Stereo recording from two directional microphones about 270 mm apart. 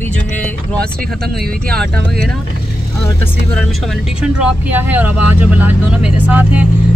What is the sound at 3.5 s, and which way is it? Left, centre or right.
Speech, centre.